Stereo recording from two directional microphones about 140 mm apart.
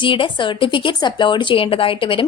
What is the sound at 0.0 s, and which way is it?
Speech, 35° left (ahead or behind).